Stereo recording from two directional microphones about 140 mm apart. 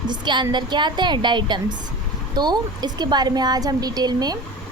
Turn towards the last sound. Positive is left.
turn(degrees=-30)  # may be behind; listen again after turning